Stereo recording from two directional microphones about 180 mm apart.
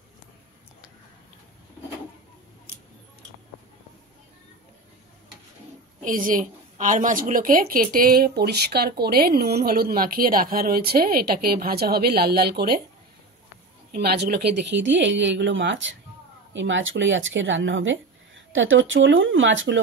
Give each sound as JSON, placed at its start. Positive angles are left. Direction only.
{"t": 6.0, "sound": "a woman's voice", "side_deg": -50}
{"t": 13.9, "sound": "speech", "side_deg": -60}